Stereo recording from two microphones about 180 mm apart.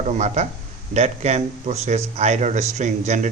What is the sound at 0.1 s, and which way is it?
Speech, 40° right (ahead or behind).